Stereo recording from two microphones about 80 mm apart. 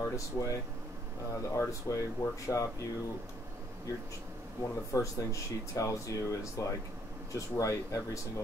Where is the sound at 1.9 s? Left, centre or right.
Left.